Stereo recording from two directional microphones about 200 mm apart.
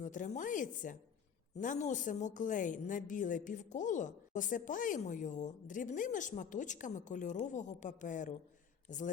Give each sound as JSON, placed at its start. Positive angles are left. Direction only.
{"t": 0.0, "sound": "a woman's voice", "side_deg": 40}